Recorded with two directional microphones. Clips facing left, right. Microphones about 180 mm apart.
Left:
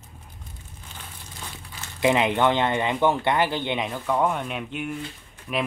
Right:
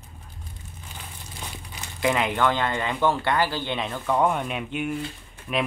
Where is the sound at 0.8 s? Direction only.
10° right (ahead or behind).